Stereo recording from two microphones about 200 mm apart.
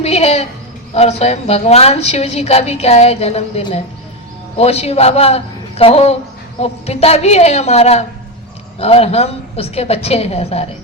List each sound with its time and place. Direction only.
0.0 s a woman's voice: 30° left (ahead or behind)